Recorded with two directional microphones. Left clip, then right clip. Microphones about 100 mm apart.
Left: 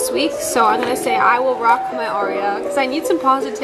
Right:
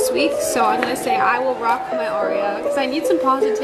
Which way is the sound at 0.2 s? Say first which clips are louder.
Left 1 dB; 20° left (ahead or behind).